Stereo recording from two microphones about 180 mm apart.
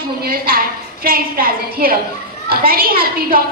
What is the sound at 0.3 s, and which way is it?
A woman's voice, 55° right (ahead or behind).